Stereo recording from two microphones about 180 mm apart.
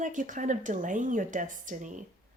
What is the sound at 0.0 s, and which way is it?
Speech, 45° right (ahead or behind).